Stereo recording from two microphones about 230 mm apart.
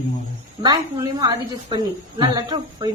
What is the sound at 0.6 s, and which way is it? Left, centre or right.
A woman's voice, centre.